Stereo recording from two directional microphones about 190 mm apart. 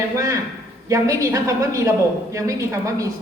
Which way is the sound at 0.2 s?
15° right (ahead or behind).